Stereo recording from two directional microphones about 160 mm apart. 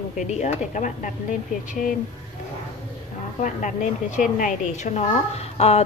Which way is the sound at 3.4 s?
50° left (ahead or behind).